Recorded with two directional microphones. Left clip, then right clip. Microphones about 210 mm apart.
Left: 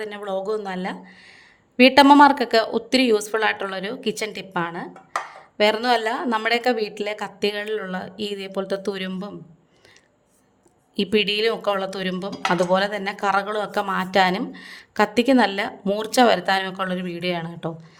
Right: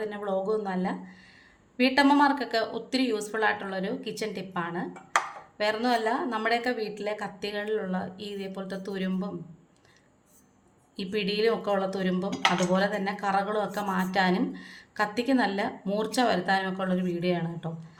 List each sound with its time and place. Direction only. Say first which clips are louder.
0.0 s speech: left 3 dB; 45° left (ahead or behind)
10.9 s speech: left 9 dB; 50° left (ahead or behind)